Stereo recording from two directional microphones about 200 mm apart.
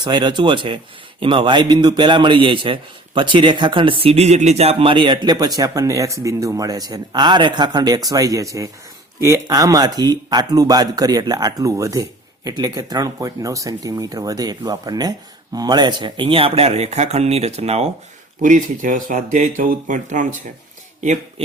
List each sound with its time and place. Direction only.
0.0 s a man's voice: 20° right (ahead or behind); by 21.4 s 35° right (ahead or behind)